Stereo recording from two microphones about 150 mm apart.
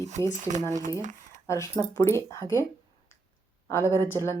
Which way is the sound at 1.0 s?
55° right (ahead or behind).